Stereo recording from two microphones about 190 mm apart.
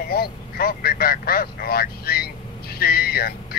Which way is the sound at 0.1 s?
55° left (ahead or behind).